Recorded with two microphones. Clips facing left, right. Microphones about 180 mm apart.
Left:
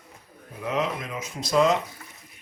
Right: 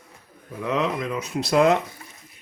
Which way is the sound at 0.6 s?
65° right (ahead or behind).